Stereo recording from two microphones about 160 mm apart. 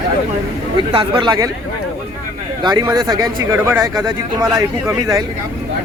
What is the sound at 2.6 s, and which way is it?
Speech, 25° right (ahead or behind).